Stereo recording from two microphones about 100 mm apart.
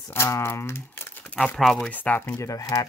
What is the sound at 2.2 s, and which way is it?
Speech, 35° left (ahead or behind).